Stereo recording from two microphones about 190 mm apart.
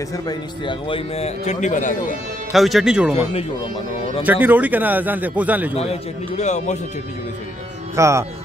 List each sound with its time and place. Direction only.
0.3 s a man's voice: 25° left (ahead or behind); by 2.1 s 40° left (ahead or behind)
2.5 s speech: centre (ahead or behind)
4.2 s a man's voice: 10° right (ahead or behind)
5.8 s a man's voice: 35° left (ahead or behind)
7.9 s speech: 15° right (ahead or behind)